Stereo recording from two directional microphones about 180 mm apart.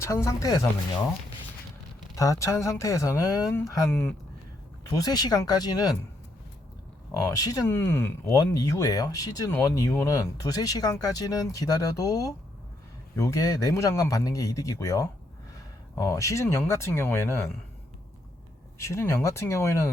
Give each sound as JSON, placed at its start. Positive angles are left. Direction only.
{"t": 0.0, "sound": "speech", "side_deg": 15}
{"t": 2.1, "sound": "speech", "side_deg": 20}
{"t": 3.8, "sound": "speech", "side_deg": 0}
{"t": 4.9, "sound": "speech", "side_deg": 20}
{"t": 7.2, "sound": "speech", "side_deg": 20}
{"t": 18.8, "sound": "speech", "side_deg": 15}